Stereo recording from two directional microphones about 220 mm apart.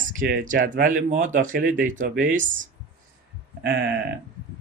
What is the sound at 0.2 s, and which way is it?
Speech, 40° right (ahead or behind).